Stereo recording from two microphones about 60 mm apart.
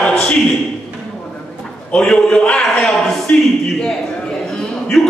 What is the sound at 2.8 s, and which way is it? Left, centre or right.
Speech, centre.